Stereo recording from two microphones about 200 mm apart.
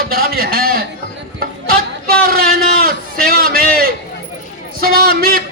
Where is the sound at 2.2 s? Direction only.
45° right (ahead or behind).